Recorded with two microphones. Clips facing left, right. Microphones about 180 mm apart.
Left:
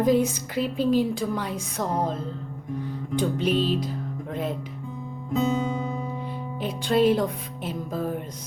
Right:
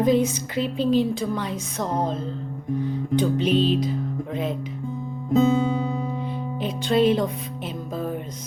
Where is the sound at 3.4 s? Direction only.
5° left (ahead or behind).